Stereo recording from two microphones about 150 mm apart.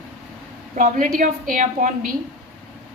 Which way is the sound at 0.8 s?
60° right (ahead or behind).